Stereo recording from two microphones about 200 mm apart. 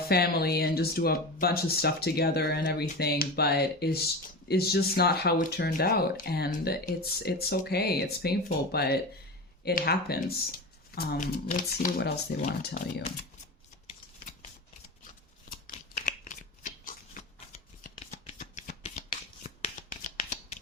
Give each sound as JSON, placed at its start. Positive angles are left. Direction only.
{"t": 0.1, "sound": "speech", "side_deg": 50}
{"t": 15.4, "sound": "shuffling cards", "side_deg": 45}